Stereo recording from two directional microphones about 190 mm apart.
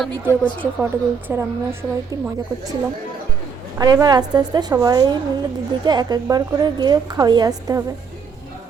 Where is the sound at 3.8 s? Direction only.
20° right (ahead or behind).